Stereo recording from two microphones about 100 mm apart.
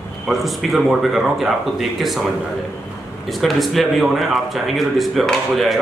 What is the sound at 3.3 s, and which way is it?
A man's voice, centre (ahead or behind).